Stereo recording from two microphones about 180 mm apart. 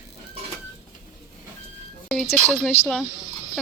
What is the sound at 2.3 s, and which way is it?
Speech, 5° left (ahead or behind).